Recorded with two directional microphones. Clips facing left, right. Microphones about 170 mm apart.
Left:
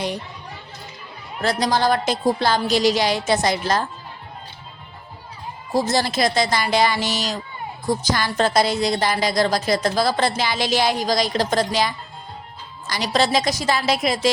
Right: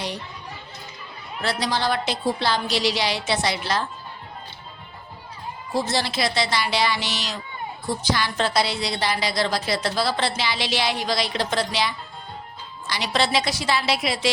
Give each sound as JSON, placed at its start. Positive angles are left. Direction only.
{"t": 1.4, "sound": "a woman's voice", "side_deg": 45}
{"t": 5.7, "sound": "a woman's voice", "side_deg": 40}